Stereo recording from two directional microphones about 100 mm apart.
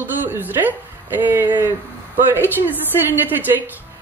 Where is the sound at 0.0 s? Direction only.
20° right (ahead or behind).